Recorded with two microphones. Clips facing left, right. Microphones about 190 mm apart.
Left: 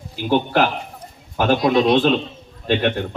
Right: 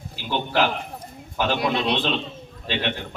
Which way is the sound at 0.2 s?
50° left (ahead or behind).